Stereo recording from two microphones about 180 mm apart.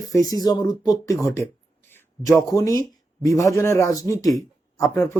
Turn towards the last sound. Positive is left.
turn(degrees=20)  # may be behind; listen again after turning